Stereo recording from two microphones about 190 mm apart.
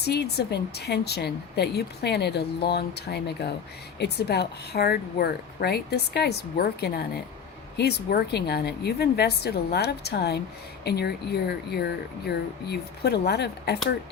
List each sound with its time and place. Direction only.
0.0 s speech: 60° left (ahead or behind)